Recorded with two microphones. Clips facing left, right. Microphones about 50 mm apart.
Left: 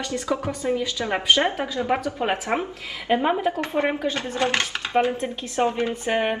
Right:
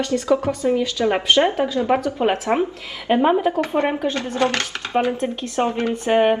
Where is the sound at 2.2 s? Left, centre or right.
Centre.